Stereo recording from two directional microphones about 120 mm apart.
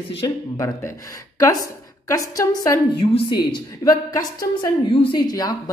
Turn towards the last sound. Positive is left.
turn(degrees=35)  # may be behind; listen again after turning